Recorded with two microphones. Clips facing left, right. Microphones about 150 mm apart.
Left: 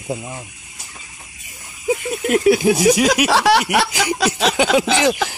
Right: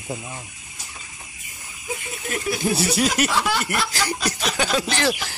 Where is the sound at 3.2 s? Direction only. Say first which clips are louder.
Left 8 dB; 85° left.